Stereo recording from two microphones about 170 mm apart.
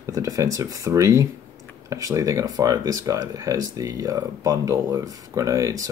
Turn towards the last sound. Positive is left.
turn(degrees=-20)  # may be behind; listen again after turning